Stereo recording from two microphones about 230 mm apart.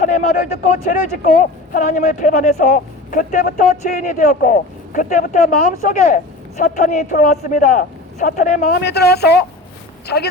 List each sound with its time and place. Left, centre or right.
0.0 s a woman's voice: left